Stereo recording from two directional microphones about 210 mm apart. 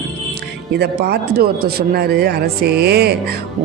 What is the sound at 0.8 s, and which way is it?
A woman's voice, 50° right (ahead or behind).